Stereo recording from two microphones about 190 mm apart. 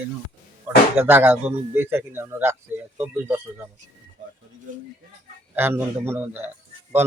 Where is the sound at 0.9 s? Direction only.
10° right (ahead or behind).